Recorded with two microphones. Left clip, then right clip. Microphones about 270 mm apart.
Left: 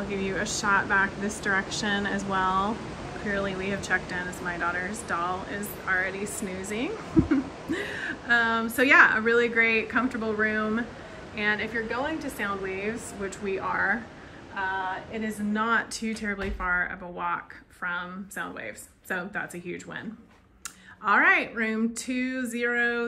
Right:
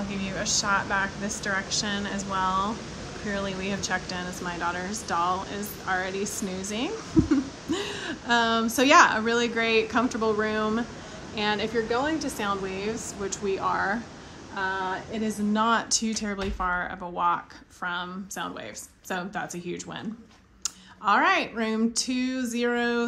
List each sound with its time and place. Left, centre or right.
0.2 s speech: centre
21.0 s speech: centre